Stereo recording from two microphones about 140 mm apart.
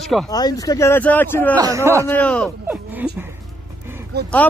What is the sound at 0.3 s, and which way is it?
Speech, 30° left (ahead or behind).